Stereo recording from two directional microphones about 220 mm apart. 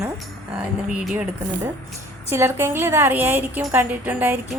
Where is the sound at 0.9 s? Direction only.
5° right (ahead or behind).